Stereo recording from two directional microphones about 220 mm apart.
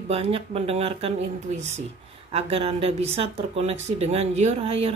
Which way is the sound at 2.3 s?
25° right (ahead or behind).